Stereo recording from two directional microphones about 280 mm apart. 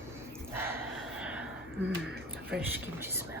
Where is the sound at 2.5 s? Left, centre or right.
Centre.